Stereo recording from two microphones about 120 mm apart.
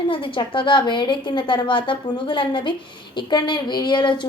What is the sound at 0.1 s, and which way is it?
A woman's voice, 45° left (ahead or behind).